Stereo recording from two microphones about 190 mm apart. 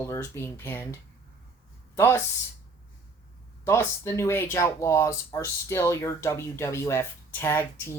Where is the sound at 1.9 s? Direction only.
15° left (ahead or behind).